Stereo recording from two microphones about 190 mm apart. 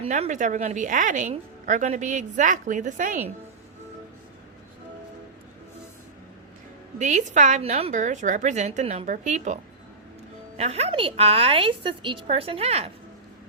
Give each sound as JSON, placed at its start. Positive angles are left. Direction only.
{"t": 0.0, "sound": "a woman's voice", "side_deg": -35}
{"t": 7.0, "sound": "a woman's voice", "side_deg": -40}
{"t": 10.6, "sound": "a woman's voice", "side_deg": -35}